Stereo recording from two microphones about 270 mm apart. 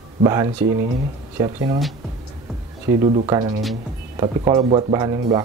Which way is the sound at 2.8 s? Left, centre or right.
Centre.